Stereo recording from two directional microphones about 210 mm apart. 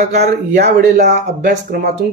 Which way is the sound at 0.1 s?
50° right (ahead or behind).